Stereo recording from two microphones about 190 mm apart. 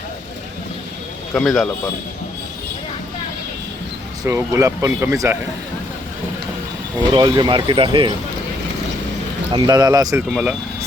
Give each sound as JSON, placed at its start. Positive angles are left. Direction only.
{"t": 1.3, "sound": "speech", "side_deg": 5}
{"t": 4.2, "sound": "speech", "side_deg": -15}
{"t": 7.1, "sound": "speech", "side_deg": -25}
{"t": 9.5, "sound": "speech", "side_deg": -20}
{"t": 10.2, "sound": "speech", "side_deg": -5}